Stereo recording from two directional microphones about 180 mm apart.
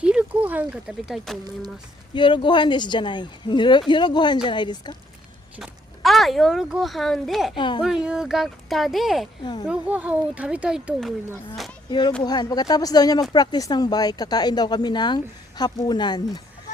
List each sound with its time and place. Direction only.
0.0 s speech: 5° right (ahead or behind)
2.1 s speech: 25° left (ahead or behind)
5.5 s speech: centre (ahead or behind)
7.5 s speech: 25° left (ahead or behind)
7.8 s speech: 5° right (ahead or behind)
9.4 s speech: 25° left (ahead or behind)
9.6 s speech: 5° right (ahead or behind)
11.9 s speech: 25° left (ahead or behind)